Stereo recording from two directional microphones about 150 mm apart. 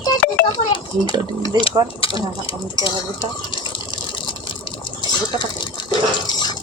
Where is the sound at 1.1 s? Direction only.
25° right (ahead or behind).